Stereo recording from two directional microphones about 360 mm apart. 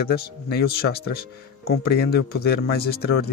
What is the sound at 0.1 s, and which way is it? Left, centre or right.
Speech, left.